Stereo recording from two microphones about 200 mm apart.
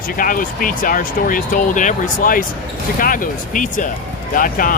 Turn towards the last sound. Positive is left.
turn(degrees=45)  # may be behind; listen again after turning